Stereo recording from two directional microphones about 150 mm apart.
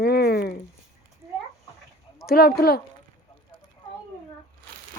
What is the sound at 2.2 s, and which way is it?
Speech, 85° left.